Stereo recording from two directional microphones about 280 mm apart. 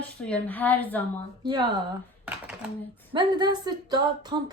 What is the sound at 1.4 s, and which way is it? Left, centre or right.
Speech, centre.